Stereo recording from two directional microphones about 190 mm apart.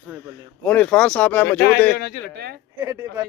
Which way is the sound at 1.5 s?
60° left (ahead or behind).